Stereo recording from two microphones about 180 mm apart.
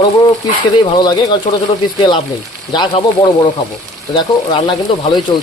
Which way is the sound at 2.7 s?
25° left (ahead or behind).